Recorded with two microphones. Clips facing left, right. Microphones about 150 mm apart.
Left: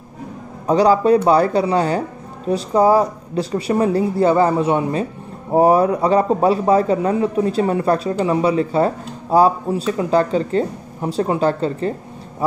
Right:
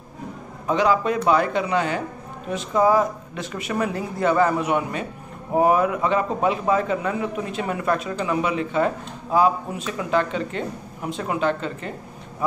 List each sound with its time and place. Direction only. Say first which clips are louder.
0.7 s a man's voice: left 7 dB; 35° left (ahead or behind)